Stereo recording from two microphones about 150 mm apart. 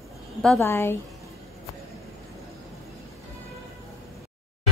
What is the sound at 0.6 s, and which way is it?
Speech, 15° left (ahead or behind).